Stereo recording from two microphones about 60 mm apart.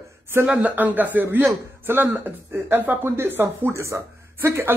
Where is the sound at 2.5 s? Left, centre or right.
Right.